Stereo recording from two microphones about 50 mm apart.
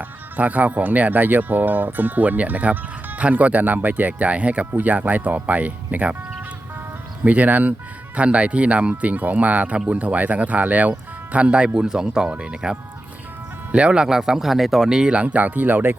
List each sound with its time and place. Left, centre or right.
0.0 s speech: right
7.3 s speech: right
13.7 s speech: right